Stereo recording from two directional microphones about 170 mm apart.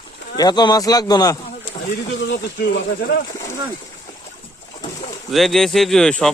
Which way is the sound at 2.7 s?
70° left (ahead or behind).